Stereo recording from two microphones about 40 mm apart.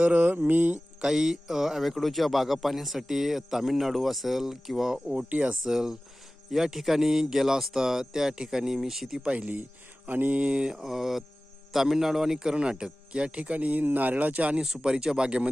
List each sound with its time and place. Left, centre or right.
0.0 s mantra: right
1.0 s speech: centre
5.1 s speech: right
5.6 s speech: centre
9.1 s speech: right
10.1 s mantra: right
10.4 s speech: right
14.6 s speech: centre